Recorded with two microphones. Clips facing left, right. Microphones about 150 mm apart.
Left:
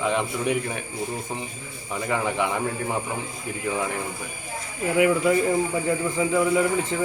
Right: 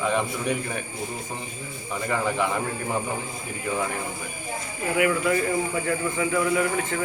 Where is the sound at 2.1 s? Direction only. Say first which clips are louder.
Even; 15° left (ahead or behind).